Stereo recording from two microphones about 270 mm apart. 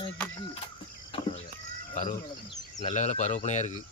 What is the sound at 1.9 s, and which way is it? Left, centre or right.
Speech, left.